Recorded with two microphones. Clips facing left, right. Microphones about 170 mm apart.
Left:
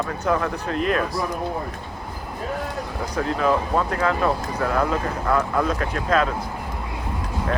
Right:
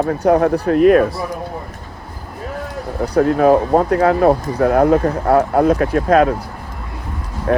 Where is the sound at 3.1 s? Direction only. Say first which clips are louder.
Right 10 dB; 55° right (ahead or behind).